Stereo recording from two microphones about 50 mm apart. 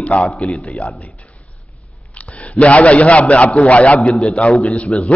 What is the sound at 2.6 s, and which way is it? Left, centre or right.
A man's voice, left.